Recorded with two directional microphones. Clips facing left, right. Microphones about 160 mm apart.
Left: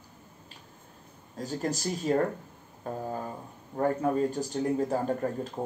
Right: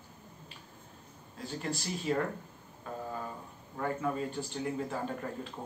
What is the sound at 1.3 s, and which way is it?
A man's voice, 40° left (ahead or behind).